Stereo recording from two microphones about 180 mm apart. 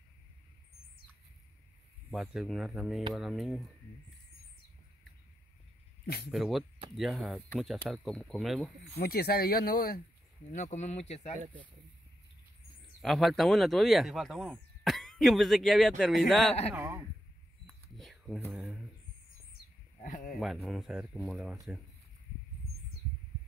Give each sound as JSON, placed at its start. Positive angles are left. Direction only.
{"t": 2.0, "sound": "speech", "side_deg": 0}
{"t": 6.0, "sound": "speech", "side_deg": 60}
{"t": 6.3, "sound": "speech", "side_deg": 0}
{"t": 8.9, "sound": "speech", "side_deg": 60}
{"t": 10.5, "sound": "speech", "side_deg": 40}
{"t": 13.0, "sound": "speech", "side_deg": 0}
{"t": 16.7, "sound": "speech", "side_deg": -15}
{"t": 17.6, "sound": "a sound", "side_deg": 0}
{"t": 20.0, "sound": "a sound", "side_deg": 45}
{"t": 20.3, "sound": "speech", "side_deg": 0}